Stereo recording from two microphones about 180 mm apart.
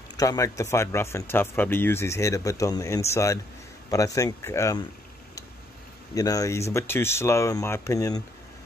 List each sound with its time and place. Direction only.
0.2 s speech: 20° left (ahead or behind)
6.1 s speech: 20° left (ahead or behind)